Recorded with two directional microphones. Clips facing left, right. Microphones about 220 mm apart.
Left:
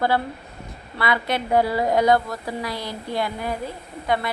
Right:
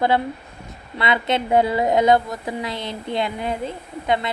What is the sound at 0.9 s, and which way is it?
A woman's voice, 20° right (ahead or behind).